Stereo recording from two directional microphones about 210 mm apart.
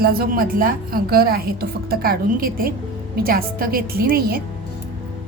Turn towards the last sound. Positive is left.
turn(degrees=-45)  # may be behind; listen again after turning